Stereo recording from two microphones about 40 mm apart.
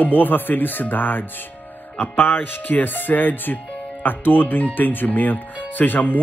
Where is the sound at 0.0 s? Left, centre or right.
Left.